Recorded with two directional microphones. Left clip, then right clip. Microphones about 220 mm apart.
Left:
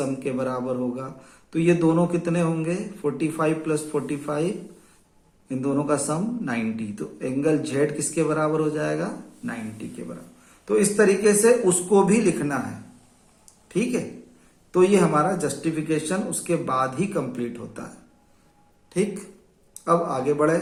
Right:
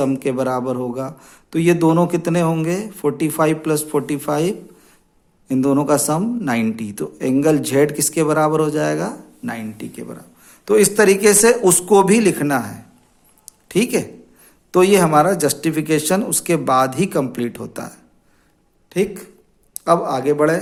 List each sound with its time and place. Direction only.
0.0 s speech: 45° right (ahead or behind)
13.4 s a sound: 45° right (ahead or behind)
14.7 s a man's voice: 45° right (ahead or behind)